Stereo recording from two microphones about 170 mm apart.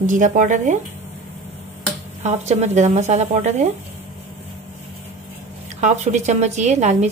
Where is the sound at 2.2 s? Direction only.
40° right (ahead or behind).